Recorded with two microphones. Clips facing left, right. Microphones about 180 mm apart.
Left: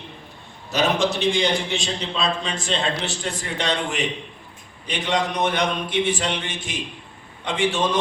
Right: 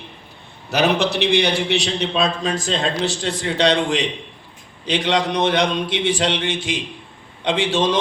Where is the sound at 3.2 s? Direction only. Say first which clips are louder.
Right 8 dB; 85° right.